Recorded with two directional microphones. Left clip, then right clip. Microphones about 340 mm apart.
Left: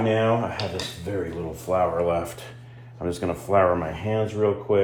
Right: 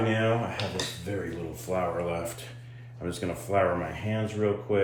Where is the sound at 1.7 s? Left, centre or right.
Centre.